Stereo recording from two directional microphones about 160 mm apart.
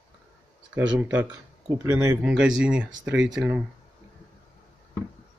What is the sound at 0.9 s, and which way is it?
Speech, 10° right (ahead or behind).